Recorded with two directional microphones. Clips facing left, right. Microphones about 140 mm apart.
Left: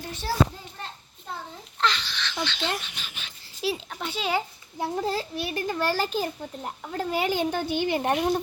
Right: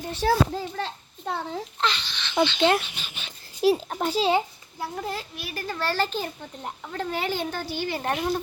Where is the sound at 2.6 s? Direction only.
65° right (ahead or behind).